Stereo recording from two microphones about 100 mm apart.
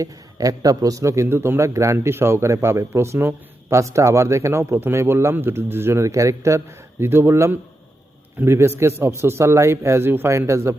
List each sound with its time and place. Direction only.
0.0 s a man's voice: 35° right (ahead or behind)